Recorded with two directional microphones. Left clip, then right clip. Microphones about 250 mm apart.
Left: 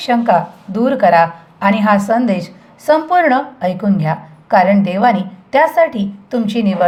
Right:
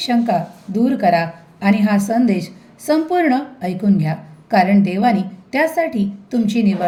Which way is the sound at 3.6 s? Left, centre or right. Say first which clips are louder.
Left 4 dB; left.